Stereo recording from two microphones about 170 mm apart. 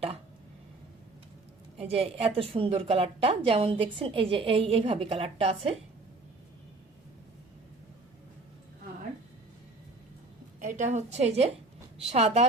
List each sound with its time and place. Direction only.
1.8 s a woman's voice: 35° right (ahead or behind)
10.6 s a woman's voice: 45° right (ahead or behind)